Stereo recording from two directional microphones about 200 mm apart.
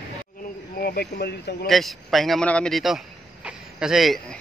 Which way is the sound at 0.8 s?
50° left (ahead or behind).